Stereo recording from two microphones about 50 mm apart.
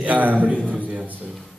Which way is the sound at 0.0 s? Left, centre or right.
Right.